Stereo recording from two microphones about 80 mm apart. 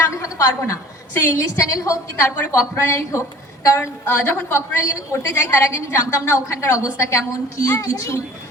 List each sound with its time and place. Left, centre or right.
0.1 s a woman's voice: left